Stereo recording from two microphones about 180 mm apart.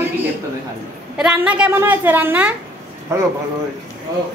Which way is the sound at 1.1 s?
5° right (ahead or behind).